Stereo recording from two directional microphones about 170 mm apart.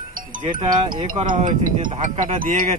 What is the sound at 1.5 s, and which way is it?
A man's voice, 50° right (ahead or behind).